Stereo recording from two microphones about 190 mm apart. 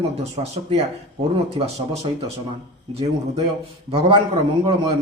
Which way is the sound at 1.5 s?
30° right (ahead or behind).